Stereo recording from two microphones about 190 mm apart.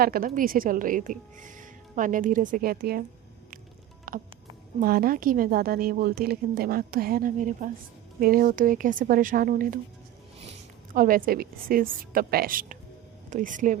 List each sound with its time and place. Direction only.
0.0 s a woman's voice: 50° right (ahead or behind)
4.1 s music: 50° right (ahead or behind)
4.8 s a woman's voice: 50° right (ahead or behind)
10.9 s a woman's voice: 45° right (ahead or behind)